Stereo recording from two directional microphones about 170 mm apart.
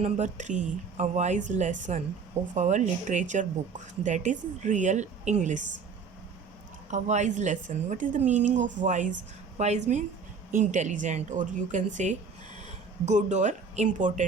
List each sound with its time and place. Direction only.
0.0 s speech: 45° right (ahead or behind)
6.9 s a woman's voice: 45° right (ahead or behind)